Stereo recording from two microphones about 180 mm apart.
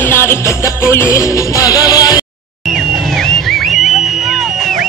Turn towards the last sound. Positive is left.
turn(degrees=0)  # may be behind; listen again after turning